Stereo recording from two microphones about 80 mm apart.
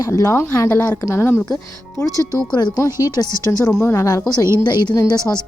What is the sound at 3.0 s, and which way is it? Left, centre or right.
Speech, left.